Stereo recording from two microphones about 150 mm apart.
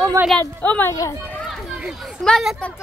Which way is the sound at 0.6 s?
10° left (ahead or behind).